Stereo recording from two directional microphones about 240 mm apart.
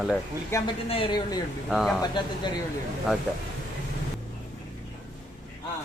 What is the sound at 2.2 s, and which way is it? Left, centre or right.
Speech, centre.